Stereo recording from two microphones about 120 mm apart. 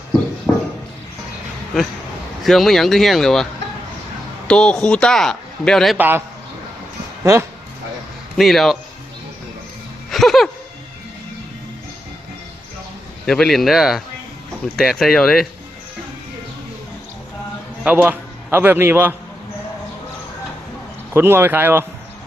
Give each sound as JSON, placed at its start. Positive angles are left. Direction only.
{"t": 0.5, "sound": "a sound", "side_deg": 10}
{"t": 2.4, "sound": "speech", "side_deg": 0}
{"t": 4.4, "sound": "a man's voice", "side_deg": 10}
{"t": 6.0, "sound": "a man's voice", "side_deg": -15}
{"t": 8.4, "sound": "speech", "side_deg": 0}
{"t": 10.1, "sound": "music", "side_deg": 0}
{"t": 13.2, "sound": "speech", "side_deg": 5}
{"t": 17.8, "sound": "a man's voice", "side_deg": -15}
{"t": 21.1, "sound": "speech", "side_deg": -20}